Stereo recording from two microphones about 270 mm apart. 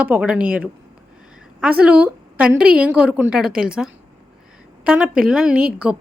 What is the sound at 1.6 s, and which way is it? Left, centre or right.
A woman's voice, centre.